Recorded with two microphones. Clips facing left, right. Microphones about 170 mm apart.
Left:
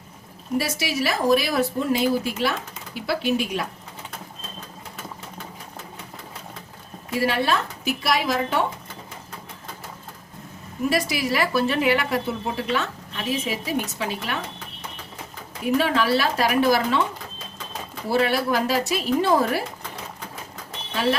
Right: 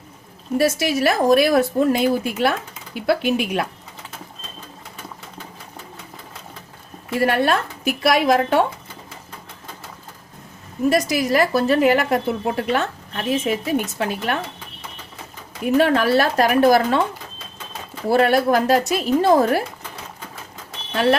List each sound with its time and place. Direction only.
0.6 s a woman's voice: 50° right (ahead or behind)
7.2 s speech: 55° right (ahead or behind)
10.8 s a woman's voice: 45° right (ahead or behind)
15.8 s a woman's voice: 50° right (ahead or behind)
18.1 s a woman's voice: 50° right (ahead or behind)
20.9 s speech: 60° right (ahead or behind)